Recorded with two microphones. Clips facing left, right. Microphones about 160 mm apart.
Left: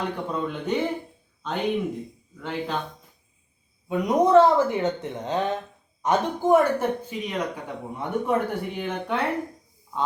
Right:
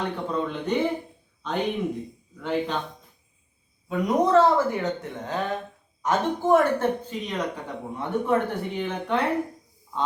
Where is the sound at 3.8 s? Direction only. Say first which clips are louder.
Left 2 dB; 20° left (ahead or behind).